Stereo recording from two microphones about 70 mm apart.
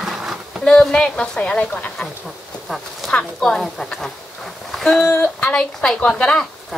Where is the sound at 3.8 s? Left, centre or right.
Centre.